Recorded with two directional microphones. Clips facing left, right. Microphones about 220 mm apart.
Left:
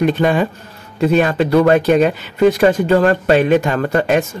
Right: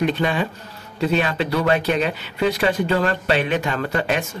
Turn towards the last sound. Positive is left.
turn(degrees=45)  # may be behind; listen again after turning